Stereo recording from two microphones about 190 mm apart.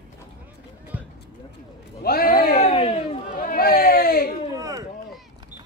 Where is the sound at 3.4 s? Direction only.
50° left (ahead or behind).